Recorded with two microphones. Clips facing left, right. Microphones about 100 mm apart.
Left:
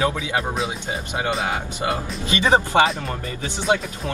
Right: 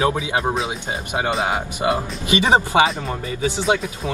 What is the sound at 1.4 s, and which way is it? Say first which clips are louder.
Speech: right 3 dB; 25° right (ahead or behind).